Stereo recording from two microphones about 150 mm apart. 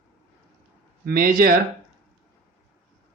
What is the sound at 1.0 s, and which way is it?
Speech, 75° right (ahead or behind).